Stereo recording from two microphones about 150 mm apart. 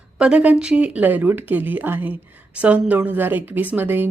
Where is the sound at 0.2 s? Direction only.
5° right (ahead or behind).